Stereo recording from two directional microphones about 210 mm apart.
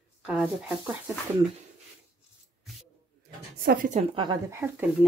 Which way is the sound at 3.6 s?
45° right (ahead or behind).